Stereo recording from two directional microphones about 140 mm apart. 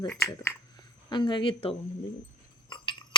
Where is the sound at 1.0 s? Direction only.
35° left (ahead or behind).